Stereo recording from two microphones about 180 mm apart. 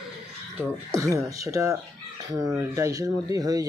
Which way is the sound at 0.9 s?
15° right (ahead or behind).